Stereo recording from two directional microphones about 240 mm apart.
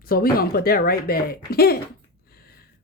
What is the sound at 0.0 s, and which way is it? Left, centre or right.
Speech, left.